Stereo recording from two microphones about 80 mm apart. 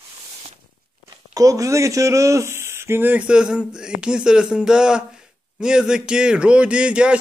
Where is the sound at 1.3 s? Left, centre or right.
Right.